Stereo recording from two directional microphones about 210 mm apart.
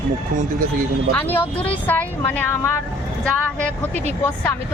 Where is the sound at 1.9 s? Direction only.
10° left (ahead or behind).